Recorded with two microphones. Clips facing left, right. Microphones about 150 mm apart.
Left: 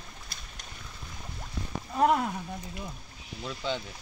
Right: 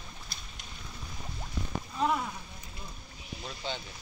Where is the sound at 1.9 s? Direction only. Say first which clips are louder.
Left 6 dB; 65° left (ahead or behind).